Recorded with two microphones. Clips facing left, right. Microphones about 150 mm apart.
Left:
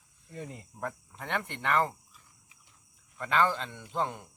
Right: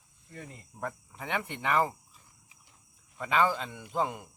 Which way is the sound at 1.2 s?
5° right (ahead or behind).